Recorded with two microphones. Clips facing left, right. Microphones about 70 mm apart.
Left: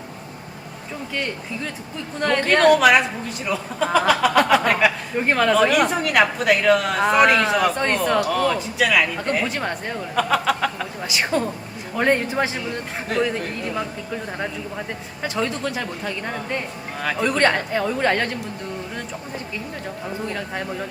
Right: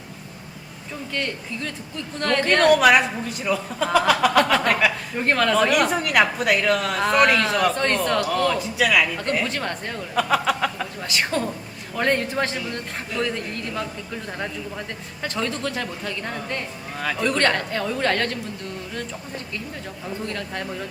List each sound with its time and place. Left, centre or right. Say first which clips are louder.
1.1 s speech: left 1 dB; centre
10.2 s a man's voice: left 1 dB; centre
20.2 s speech: left 2 dB; centre